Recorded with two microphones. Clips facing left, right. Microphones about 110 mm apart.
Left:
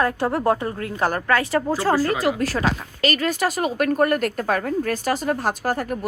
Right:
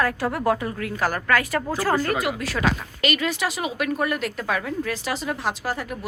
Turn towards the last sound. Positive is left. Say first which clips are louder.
# left 5 dB
turn(degrees=45)  # may be behind; listen again after turning